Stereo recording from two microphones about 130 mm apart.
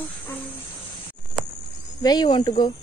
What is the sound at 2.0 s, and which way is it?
Speech, 35° left (ahead or behind).